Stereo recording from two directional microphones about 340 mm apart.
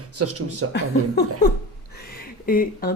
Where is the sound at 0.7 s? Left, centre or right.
Left.